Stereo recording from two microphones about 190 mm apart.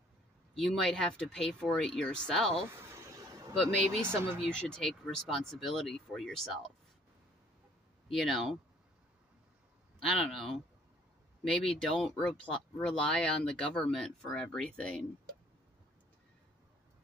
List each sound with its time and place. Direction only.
0.6 s speech: 5° left (ahead or behind)
2.8 s a sound: 15° right (ahead or behind)
3.5 s speech: centre (ahead or behind)
8.1 s speech: centre (ahead or behind)
10.2 s speech: centre (ahead or behind)